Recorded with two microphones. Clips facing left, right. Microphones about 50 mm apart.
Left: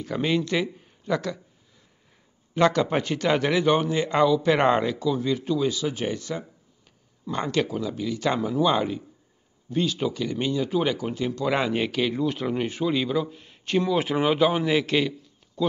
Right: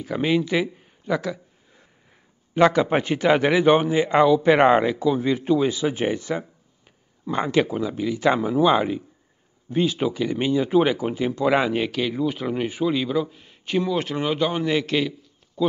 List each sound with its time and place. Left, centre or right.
0.0 s speech: centre
2.5 s a man's voice: centre
14.0 s a man's voice: centre